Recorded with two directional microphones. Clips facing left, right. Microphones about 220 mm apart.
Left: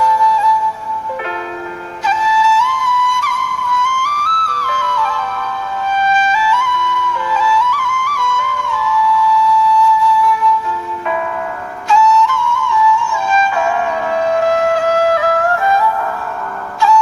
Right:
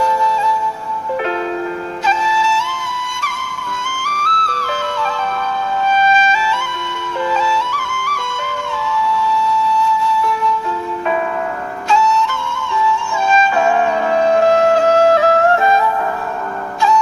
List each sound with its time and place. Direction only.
0.0 s music: 25° right (ahead or behind)
2.0 s music: 25° right (ahead or behind)
11.9 s flute: 25° right (ahead or behind)